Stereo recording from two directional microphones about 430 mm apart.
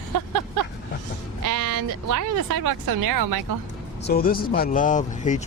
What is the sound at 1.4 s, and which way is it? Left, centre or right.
A woman's voice, right.